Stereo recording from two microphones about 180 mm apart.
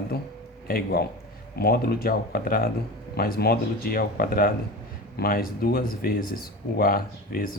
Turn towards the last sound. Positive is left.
turn(degrees=55)  # may be behind; listen again after turning